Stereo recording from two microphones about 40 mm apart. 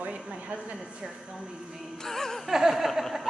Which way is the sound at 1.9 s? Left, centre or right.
Centre.